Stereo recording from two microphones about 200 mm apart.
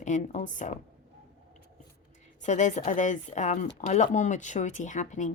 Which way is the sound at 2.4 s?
35° left (ahead or behind).